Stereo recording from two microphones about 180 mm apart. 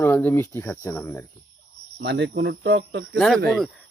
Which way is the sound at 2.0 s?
75° right (ahead or behind).